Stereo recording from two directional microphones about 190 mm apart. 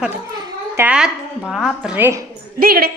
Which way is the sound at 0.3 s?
20° right (ahead or behind).